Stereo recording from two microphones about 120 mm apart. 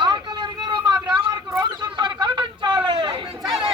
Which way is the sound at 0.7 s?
35° right (ahead or behind).